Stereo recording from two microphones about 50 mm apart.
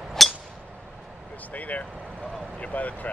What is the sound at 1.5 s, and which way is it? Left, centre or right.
Speech, left.